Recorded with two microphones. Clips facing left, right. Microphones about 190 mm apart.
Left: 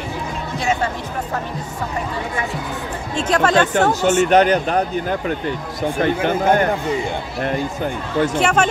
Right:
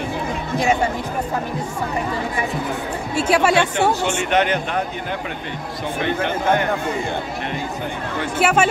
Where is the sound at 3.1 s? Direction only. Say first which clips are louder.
Even; 10° right (ahead or behind).